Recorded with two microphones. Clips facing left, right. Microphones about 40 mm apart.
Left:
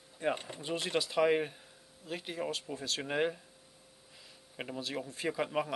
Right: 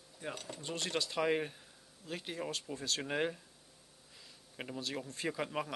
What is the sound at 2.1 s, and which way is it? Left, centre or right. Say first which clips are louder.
Speech: left 3 dB; centre.